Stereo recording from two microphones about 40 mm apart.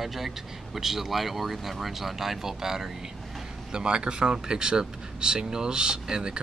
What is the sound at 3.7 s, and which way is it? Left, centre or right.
Speech, right.